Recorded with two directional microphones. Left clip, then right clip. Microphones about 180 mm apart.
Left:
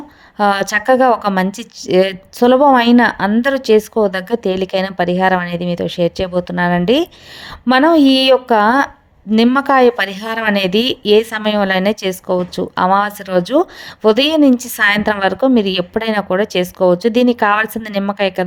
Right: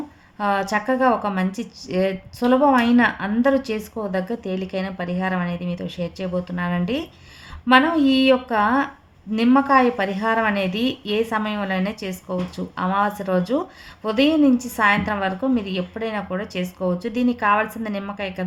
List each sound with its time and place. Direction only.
0.3 s a woman's voice: 45° left (ahead or behind)